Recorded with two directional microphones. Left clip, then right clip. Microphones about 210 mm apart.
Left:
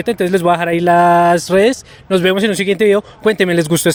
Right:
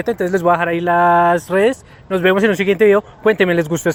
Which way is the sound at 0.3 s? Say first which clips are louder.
Left 1 dB; 45° left (ahead or behind).